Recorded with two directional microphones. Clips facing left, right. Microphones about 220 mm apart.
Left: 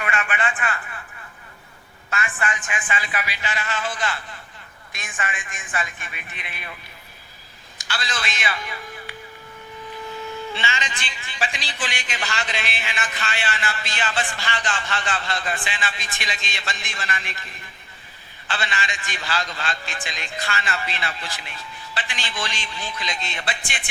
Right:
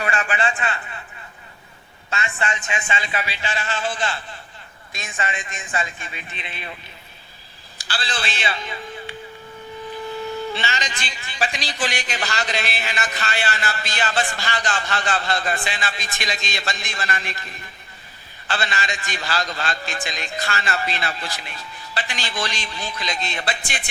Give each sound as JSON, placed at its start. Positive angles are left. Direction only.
{"t": 0.0, "sound": "a man's voice", "side_deg": -30}
{"t": 2.0, "sound": "a man's voice", "side_deg": -25}
{"t": 7.8, "sound": "a man's voice", "side_deg": -30}
{"t": 10.5, "sound": "a man's voice", "side_deg": -40}